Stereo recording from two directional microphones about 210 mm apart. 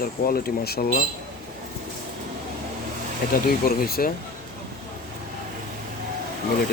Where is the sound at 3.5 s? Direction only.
45° left (ahead or behind).